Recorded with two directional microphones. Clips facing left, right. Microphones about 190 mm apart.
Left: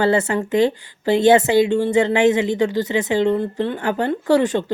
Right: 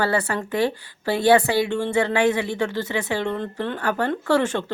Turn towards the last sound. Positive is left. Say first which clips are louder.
# left 4 dB
turn(degrees=15)  # may be behind; listen again after turning